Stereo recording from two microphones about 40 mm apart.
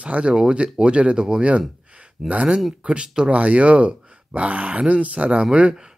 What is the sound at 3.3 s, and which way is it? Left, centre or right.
Speech, right.